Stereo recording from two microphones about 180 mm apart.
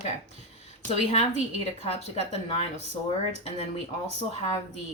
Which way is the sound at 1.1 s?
35° left (ahead or behind).